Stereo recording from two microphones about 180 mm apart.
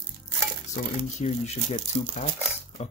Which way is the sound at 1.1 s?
40° left (ahead or behind).